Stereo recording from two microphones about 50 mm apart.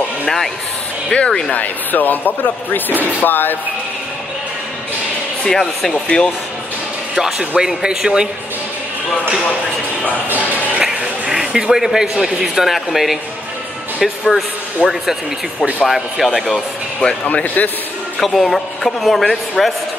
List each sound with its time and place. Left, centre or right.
1.1 s speech: centre
1.5 s speech: left
5.4 s speech: centre
6.0 s speech: left
7.2 s speech: centre
10.8 s speech: centre
14.8 s speech: right
15.8 s a man's voice: centre
16.5 s speech: centre
17.3 s speech: left
18.2 s a man's voice: centre